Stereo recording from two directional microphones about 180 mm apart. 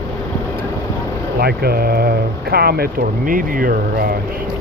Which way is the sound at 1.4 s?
60° right (ahead or behind).